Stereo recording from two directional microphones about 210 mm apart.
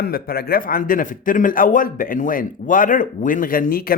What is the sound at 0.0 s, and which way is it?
A man's voice, 45° left (ahead or behind).